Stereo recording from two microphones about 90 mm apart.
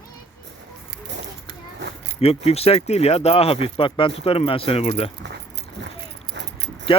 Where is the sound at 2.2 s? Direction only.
90° left.